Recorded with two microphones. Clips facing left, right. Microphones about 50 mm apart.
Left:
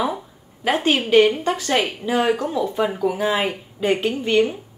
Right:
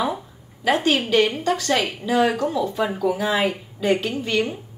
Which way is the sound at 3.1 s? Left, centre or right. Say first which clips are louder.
Even; left.